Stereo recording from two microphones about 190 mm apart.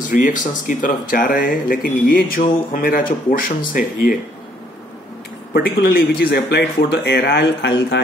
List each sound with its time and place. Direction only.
0.1 s speech: 45° left (ahead or behind)
5.5 s speech: 55° left (ahead or behind)